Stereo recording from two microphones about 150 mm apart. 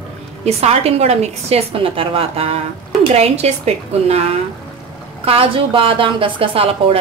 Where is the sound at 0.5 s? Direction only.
45° right (ahead or behind).